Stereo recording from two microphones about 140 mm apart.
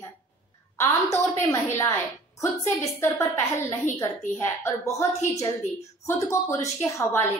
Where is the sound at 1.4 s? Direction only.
20° left (ahead or behind).